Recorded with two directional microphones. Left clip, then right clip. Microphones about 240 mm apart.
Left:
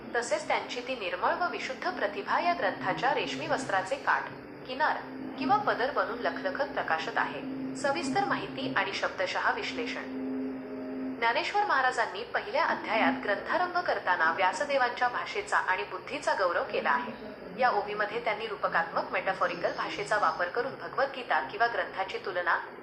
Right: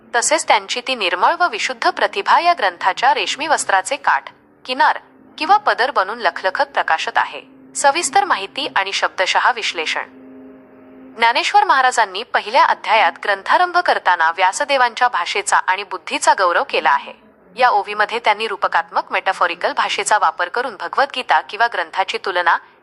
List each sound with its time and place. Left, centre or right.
0.1 s a woman's voice: right
11.2 s a woman's voice: right